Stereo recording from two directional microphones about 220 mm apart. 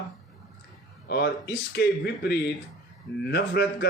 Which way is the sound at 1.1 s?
50° left (ahead or behind).